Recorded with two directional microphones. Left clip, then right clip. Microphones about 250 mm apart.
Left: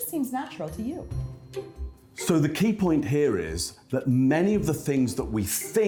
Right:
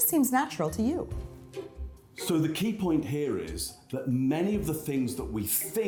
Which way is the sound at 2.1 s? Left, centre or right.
Left.